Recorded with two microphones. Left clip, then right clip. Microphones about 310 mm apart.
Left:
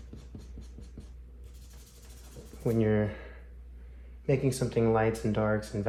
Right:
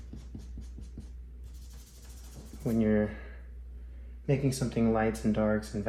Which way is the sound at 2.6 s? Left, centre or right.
Left.